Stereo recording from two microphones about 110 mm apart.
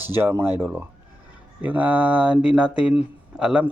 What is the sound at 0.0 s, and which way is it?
A man's voice, 20° right (ahead or behind).